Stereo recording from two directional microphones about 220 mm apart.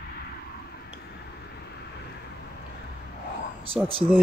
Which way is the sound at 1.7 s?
50° left (ahead or behind).